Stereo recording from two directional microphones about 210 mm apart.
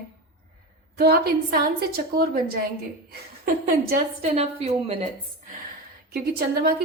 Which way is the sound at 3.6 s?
40° right (ahead or behind).